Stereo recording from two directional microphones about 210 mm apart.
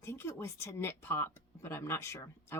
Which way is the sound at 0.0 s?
10° left (ahead or behind).